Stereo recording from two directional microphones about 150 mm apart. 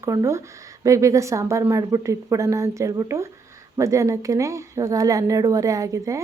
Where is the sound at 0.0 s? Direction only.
20° right (ahead or behind).